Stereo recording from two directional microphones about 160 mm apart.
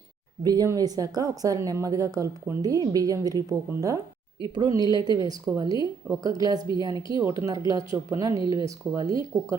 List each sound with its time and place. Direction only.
0.4 s speech: 25° right (ahead or behind)